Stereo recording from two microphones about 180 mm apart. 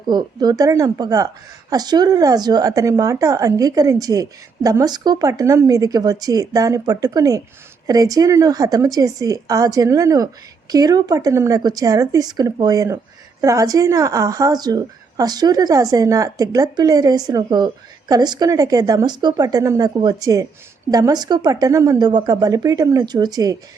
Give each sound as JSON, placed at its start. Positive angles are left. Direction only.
{"t": 0.1, "sound": "a woman's voice", "side_deg": -25}